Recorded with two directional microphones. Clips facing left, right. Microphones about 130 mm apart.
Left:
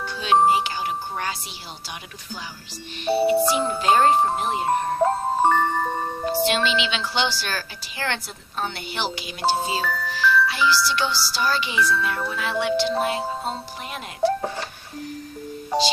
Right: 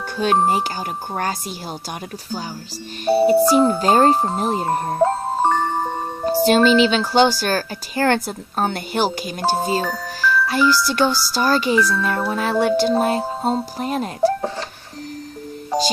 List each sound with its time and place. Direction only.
0.2 s speech: 45° right (ahead or behind)
3.2 s speech: 40° right (ahead or behind)
5.4 s music: 15° right (ahead or behind)
6.2 s speech: 40° right (ahead or behind)